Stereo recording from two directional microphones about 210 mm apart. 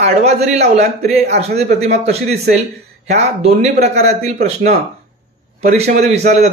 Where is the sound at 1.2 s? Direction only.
50° right (ahead or behind).